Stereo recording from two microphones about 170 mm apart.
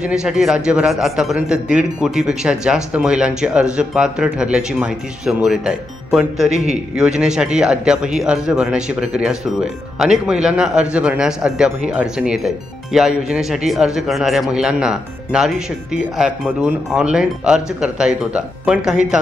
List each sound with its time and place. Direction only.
0.0 s a man's voice: 5° right (ahead or behind)
6.5 s a man's voice: 40° right (ahead or behind)
7.0 s a man's voice: 5° right (ahead or behind)